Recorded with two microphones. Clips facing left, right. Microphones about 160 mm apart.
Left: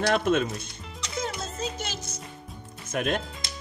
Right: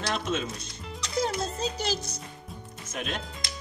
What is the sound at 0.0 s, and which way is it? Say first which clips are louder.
Speech: left 7 dB; 55° left (ahead or behind).